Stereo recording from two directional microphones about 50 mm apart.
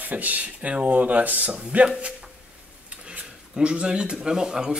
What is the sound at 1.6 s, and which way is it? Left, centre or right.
Speech, right.